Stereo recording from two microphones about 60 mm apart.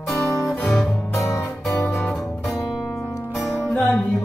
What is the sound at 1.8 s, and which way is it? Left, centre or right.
Music, left.